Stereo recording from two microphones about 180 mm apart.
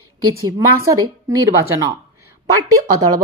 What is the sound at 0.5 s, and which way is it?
A woman's voice, 15° right (ahead or behind).